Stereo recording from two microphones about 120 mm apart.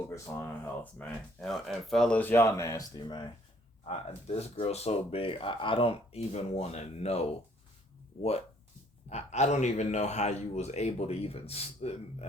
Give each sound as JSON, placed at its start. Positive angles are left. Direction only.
{"t": 0.1, "sound": "speech", "side_deg": 20}
{"t": 3.8, "sound": "speech", "side_deg": 60}
{"t": 8.1, "sound": "speech", "side_deg": 30}
{"t": 9.0, "sound": "speech", "side_deg": 65}